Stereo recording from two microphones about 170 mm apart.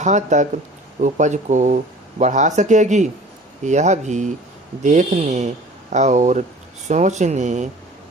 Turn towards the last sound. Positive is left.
turn(degrees=-45)  # may be behind; listen again after turning